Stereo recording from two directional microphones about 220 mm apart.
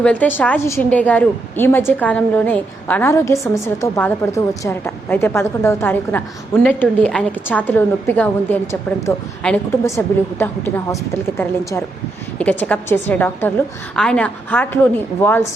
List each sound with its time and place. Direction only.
0.0 s speech: 5° left (ahead or behind)
12.4 s speech: 5° left (ahead or behind)